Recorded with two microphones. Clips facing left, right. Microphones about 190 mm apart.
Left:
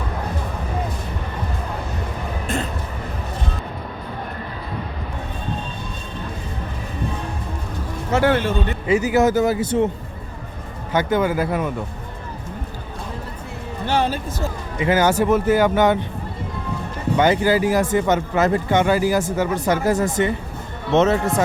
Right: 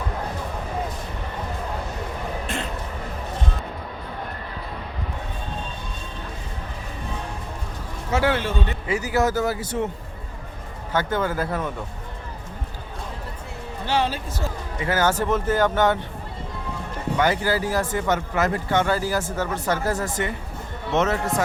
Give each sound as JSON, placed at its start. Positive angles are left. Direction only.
{"t": 8.1, "sound": "a man's voice", "side_deg": 50}
{"t": 8.9, "sound": "a man's voice", "side_deg": 20}
{"t": 10.9, "sound": "speech", "side_deg": 15}
{"t": 13.8, "sound": "music", "side_deg": 50}
{"t": 14.8, "sound": "speech", "side_deg": 15}
{"t": 17.2, "sound": "a man's voice", "side_deg": 20}